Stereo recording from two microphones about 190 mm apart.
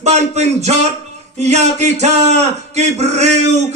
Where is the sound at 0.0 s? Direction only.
35° right (ahead or behind).